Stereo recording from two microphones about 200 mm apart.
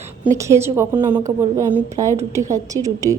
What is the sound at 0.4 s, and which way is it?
A woman's voice, 15° right (ahead or behind).